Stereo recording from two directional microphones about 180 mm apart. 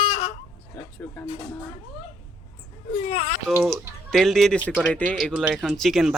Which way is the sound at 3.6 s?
Centre (ahead or behind).